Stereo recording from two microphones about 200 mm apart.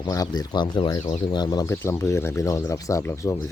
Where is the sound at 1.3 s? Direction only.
20° left (ahead or behind).